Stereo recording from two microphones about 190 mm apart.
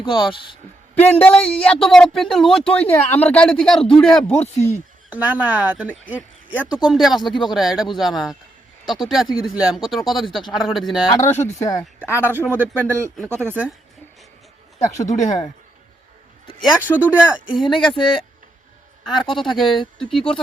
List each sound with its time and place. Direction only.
0.0 s speech: 25° left (ahead or behind)
0.9 s a man's voice: 10° left (ahead or behind)
4.5 s speech: 35° left (ahead or behind)
5.0 s a man's voice: 10° right (ahead or behind)
11.1 s speech: 15° left (ahead or behind)
12.2 s speech: 10° right (ahead or behind)
15.0 s speech: 40° left (ahead or behind)
16.6 s a man's voice: 10° right (ahead or behind)